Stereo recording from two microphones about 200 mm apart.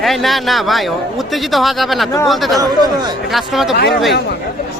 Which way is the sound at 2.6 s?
20° right (ahead or behind).